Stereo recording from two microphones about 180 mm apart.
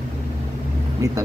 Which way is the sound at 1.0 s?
15° right (ahead or behind).